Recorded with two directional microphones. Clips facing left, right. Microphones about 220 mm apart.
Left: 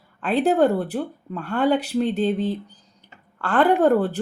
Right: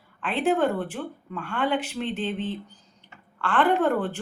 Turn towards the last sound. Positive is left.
turn(degrees=40)  # may be behind; listen again after turning